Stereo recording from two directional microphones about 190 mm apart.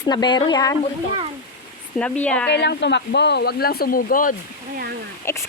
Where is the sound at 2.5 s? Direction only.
65° left (ahead or behind); by 4.3 s 45° left (ahead or behind).